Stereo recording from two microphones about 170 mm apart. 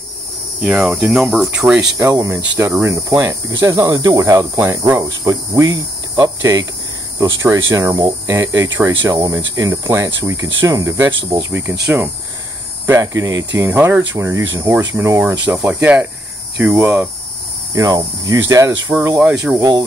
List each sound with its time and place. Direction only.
0.6 s cricket: 5° right (ahead or behind)
2.0 s speech: 20° right (ahead or behind)
10.2 s cricket: 20° right (ahead or behind)
12.8 s cricket: 15° right (ahead or behind)
17.7 s speech: 20° right (ahead or behind)
18.5 s cricket: 20° right (ahead or behind)